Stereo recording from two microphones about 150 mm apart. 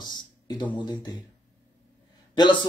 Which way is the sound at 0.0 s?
30° left (ahead or behind).